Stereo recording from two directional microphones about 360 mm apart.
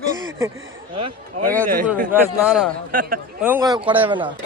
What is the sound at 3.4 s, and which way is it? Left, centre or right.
Speech, centre.